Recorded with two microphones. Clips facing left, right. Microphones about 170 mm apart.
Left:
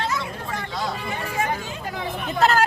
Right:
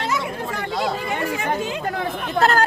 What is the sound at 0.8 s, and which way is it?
Speech, 70° right (ahead or behind).